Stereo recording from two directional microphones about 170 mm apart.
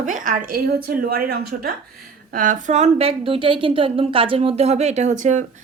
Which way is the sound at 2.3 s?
50° right (ahead or behind).